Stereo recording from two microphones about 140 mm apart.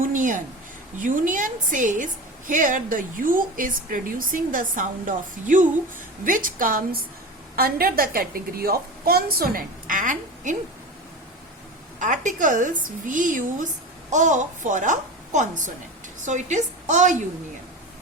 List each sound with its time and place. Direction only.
0.0 s a sound: 70° right (ahead or behind)
0.9 s a woman's voice: 65° right (ahead or behind)
11.9 s a woman's voice: 65° right (ahead or behind)